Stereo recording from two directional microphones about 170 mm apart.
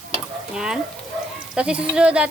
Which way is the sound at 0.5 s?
5° right (ahead or behind).